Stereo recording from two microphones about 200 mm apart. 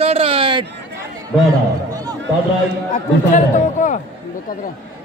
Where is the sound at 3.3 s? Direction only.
40° left (ahead or behind).